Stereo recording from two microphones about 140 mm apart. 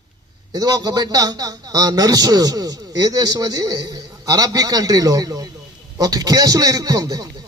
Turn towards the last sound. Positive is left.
turn(degrees=-30)  # may be behind; listen again after turning